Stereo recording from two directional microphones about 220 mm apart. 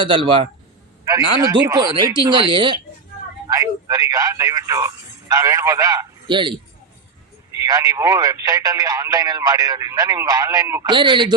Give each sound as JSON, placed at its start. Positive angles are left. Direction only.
{"t": 0.0, "sound": "speech", "side_deg": -20}
{"t": 7.6, "sound": "speech", "side_deg": -15}